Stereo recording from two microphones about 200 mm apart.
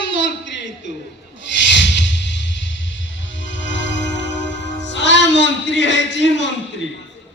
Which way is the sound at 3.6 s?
65° left (ahead or behind).